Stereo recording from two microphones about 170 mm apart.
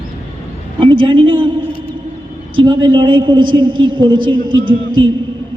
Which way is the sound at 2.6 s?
25° right (ahead or behind).